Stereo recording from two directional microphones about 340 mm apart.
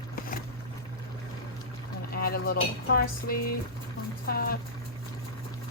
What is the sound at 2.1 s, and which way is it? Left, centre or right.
Speech, left.